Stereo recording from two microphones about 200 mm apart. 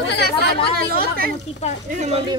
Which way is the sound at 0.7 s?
50° right (ahead or behind).